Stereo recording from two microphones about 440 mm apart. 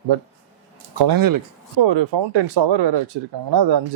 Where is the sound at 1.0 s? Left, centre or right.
Right.